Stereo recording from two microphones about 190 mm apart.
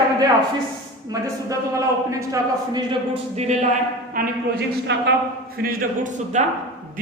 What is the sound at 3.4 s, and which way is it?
Speech, 35° right (ahead or behind).